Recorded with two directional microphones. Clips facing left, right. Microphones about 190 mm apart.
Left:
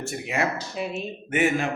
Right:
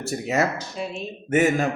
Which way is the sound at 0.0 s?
40° right (ahead or behind).